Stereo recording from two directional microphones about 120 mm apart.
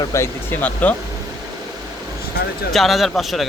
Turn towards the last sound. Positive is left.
turn(degrees=0)  # may be behind; listen again after turning